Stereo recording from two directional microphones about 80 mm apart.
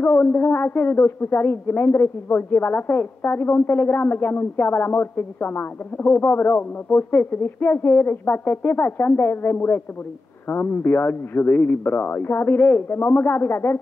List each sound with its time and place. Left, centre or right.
0.0 s speech: left